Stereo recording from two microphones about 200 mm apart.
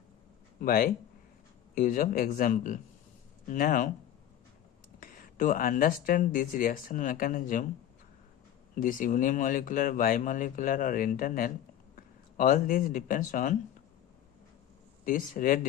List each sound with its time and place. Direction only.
0.6 s speech: 45° left (ahead or behind)
4.9 s speech: 45° left (ahead or behind)
8.7 s speech: 40° left (ahead or behind)
15.0 s speech: 45° left (ahead or behind)